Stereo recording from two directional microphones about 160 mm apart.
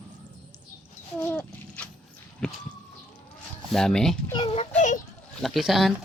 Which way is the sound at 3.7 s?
5° left (ahead or behind).